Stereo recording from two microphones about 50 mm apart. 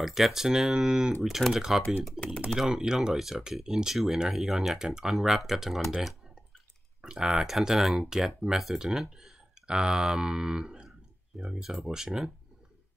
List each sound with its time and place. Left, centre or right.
0.0 s speech: centre
2.1 s speech: left
2.7 s speech: centre
7.0 s speech: centre